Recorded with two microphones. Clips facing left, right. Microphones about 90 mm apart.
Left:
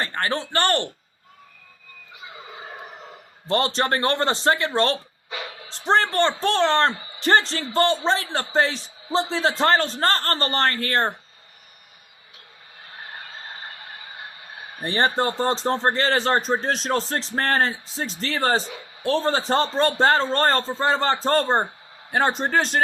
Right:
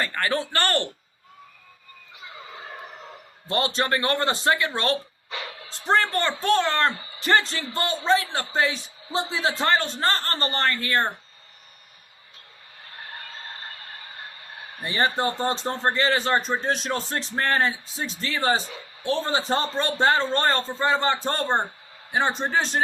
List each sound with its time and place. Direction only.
0.0 s speech: 30° left (ahead or behind)
2.1 s gobble: 5° left (ahead or behind)
3.5 s a man's voice: 35° left (ahead or behind)
14.8 s a man's voice: 35° left (ahead or behind)
22.1 s a man's voice: 55° left (ahead or behind)